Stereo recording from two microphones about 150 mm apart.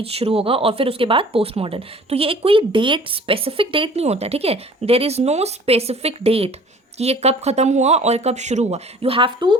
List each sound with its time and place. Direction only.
0.0 s speech: 40° right (ahead or behind)